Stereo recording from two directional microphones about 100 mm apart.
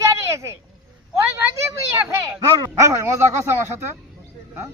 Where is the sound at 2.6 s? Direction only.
30° right (ahead or behind).